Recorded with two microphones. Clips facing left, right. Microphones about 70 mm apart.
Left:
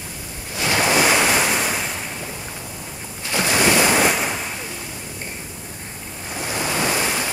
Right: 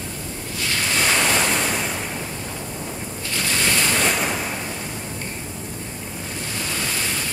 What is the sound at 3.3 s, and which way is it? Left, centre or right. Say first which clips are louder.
Ocean: left 6 dB; centre.